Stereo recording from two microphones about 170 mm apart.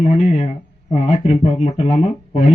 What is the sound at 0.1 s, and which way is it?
Speech, 40° left (ahead or behind).